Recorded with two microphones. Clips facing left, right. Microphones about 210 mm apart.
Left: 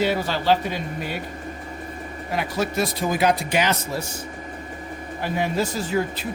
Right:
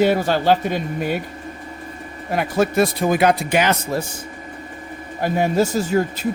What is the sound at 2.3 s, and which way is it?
Speech, 50° right (ahead or behind).